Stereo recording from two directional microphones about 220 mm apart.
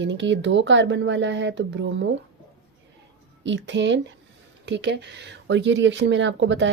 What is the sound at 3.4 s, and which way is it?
Speech, 55° right (ahead or behind).